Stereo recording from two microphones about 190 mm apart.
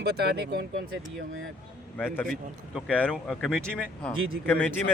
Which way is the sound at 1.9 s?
10° left (ahead or behind).